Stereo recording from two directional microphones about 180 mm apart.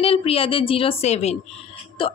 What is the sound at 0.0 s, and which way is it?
A woman's voice, 30° left (ahead or behind).